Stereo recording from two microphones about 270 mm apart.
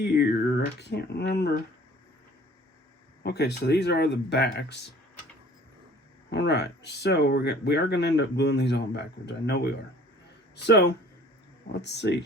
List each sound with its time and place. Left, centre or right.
0.0 s speech: left
3.2 s speech: left
6.3 s speech: left